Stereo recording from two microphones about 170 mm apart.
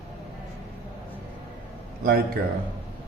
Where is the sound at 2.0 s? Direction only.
65° right (ahead or behind).